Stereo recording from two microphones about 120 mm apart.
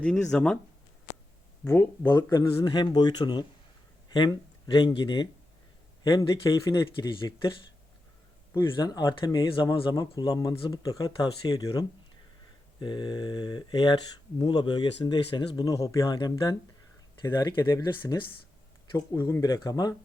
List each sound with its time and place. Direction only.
0.0 s speech: 5° left (ahead or behind)
1.6 s speech: 20° left (ahead or behind)
2.6 s speech: 35° left (ahead or behind)
6.0 s speech: 30° left (ahead or behind)
6.8 s speech: 40° left (ahead or behind)
8.5 s speech: 35° left (ahead or behind)
17.7 s speech: 25° left (ahead or behind)